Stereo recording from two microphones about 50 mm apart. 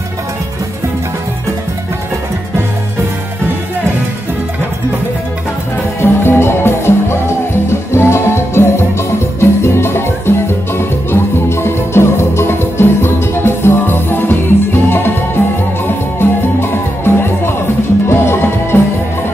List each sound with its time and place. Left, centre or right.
5.9 s music: left